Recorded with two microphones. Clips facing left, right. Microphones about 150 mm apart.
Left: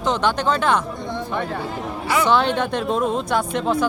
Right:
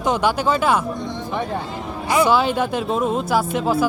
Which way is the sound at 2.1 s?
10° right (ahead or behind).